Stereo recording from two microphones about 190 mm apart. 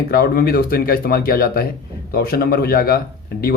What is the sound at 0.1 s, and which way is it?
Speech, 50° left (ahead or behind).